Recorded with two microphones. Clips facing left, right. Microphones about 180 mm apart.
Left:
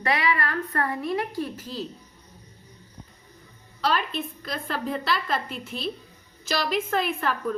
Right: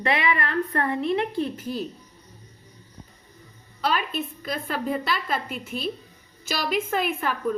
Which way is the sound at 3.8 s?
5° right (ahead or behind).